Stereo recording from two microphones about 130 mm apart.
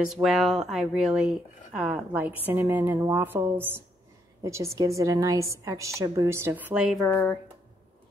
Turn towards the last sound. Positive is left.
turn(degrees=10)  # may be behind; listen again after turning